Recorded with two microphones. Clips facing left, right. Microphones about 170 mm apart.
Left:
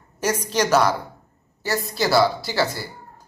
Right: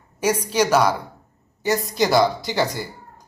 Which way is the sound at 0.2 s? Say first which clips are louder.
Right 2 dB; 10° right (ahead or behind).